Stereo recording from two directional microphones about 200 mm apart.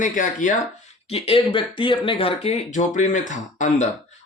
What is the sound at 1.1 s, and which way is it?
Speech, 30° left (ahead or behind).